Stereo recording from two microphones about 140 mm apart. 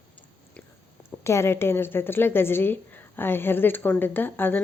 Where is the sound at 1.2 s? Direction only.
20° left (ahead or behind).